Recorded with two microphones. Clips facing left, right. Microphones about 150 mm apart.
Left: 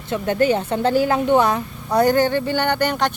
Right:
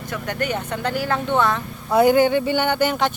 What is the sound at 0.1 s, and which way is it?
Speech, 25° left (ahead or behind).